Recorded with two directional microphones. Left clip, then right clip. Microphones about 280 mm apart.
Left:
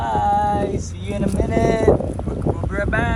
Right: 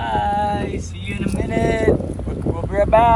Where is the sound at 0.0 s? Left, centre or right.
Centre.